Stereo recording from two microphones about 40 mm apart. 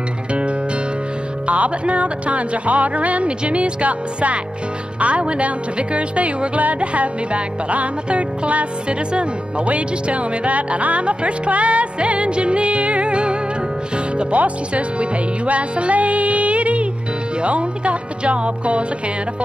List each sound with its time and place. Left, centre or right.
0.3 s music: right
1.5 s speech: right
13.9 s music: right
17.4 s speech: right